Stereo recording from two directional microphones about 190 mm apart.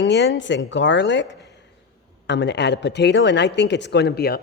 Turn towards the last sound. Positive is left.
turn(degrees=55)  # may be behind; listen again after turning